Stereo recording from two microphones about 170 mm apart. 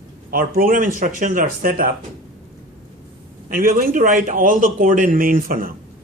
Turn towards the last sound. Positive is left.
turn(degrees=-55)  # may be behind; listen again after turning